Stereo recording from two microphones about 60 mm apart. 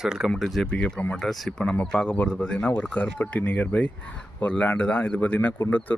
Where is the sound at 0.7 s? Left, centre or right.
Centre.